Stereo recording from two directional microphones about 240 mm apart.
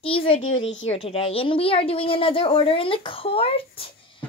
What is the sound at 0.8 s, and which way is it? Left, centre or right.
A woman's voice, left.